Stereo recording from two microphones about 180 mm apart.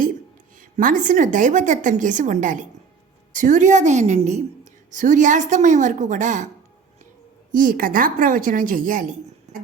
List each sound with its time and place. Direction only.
0.5 s a woman's voice: 50° right (ahead or behind)
7.5 s a woman's voice: 50° right (ahead or behind)